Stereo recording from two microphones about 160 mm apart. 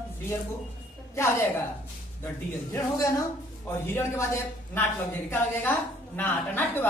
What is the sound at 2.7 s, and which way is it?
A woman's voice, 20° left (ahead or behind).